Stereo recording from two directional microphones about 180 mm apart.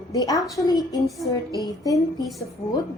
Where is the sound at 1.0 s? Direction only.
Centre (ahead or behind).